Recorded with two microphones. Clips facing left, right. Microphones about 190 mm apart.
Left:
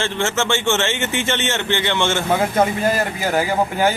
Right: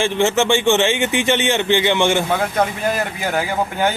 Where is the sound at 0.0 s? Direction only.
15° right (ahead or behind).